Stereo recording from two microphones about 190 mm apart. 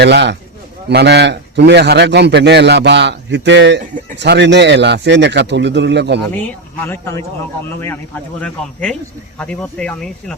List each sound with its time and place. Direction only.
0.0 s a man's voice: 65° right (ahead or behind)
6.3 s speech: 10° left (ahead or behind)